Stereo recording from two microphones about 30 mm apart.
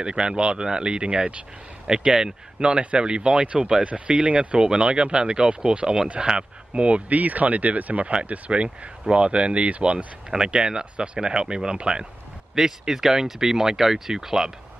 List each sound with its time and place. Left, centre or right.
0.0 s speech: right
2.6 s speech: right
4.6 s speech: right
7.1 s speech: right
8.5 s speech: right
10.3 s speech: right
12.5 s speech: centre